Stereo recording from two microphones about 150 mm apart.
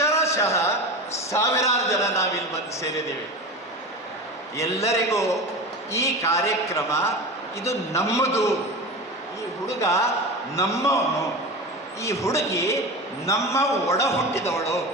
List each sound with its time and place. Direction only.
0.0 s a sound: 20° left (ahead or behind)
1.3 s a man's voice: 20° left (ahead or behind)
4.5 s a man's voice: 20° left (ahead or behind)
9.6 s a man's voice: 20° left (ahead or behind)